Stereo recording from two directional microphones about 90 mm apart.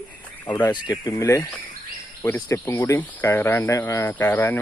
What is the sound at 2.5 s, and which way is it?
Speech, 30° left (ahead or behind).